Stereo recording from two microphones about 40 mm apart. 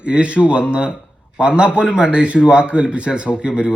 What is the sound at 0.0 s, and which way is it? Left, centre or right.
A man's voice, right.